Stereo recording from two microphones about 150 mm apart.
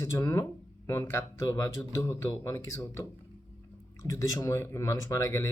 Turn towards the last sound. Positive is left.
turn(degrees=20)  # may be behind; listen again after turning